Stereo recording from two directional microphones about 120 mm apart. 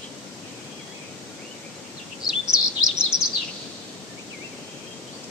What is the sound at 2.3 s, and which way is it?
Bird vocalization, 5° right (ahead or behind).